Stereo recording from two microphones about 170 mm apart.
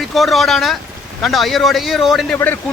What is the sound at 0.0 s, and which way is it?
A man's voice, centre (ahead or behind).